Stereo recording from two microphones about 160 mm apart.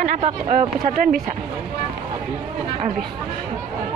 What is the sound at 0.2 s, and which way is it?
Speech, 50° right (ahead or behind).